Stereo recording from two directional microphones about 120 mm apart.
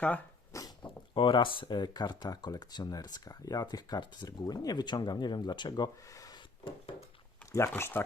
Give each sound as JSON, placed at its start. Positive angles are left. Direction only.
{"t": 0.5, "sound": "a sound", "side_deg": 25}
{"t": 0.9, "sound": "speech", "side_deg": 45}
{"t": 7.5, "sound": "speech", "side_deg": 20}